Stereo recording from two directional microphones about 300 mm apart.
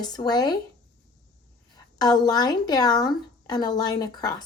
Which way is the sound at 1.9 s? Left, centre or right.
Centre.